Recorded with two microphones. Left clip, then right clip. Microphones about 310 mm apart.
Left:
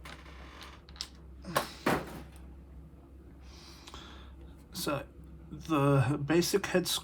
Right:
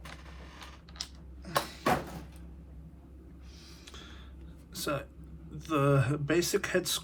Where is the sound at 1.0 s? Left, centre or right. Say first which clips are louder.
Right 1 dB; right.